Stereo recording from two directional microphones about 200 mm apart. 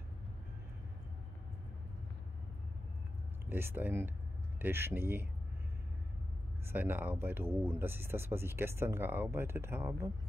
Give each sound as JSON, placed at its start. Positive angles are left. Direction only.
{"t": 3.4, "sound": "speech", "side_deg": -10}
{"t": 6.7, "sound": "speech", "side_deg": -10}